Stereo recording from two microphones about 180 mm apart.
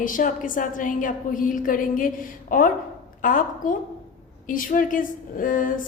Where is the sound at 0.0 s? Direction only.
50° left (ahead or behind).